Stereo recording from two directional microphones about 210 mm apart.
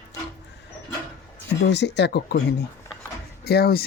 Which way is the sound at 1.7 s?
55° left (ahead or behind).